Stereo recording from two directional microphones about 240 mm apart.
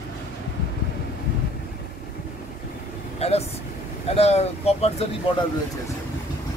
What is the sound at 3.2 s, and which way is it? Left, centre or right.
Speech, left.